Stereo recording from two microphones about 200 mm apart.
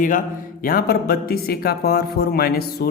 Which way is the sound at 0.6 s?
45° left (ahead or behind).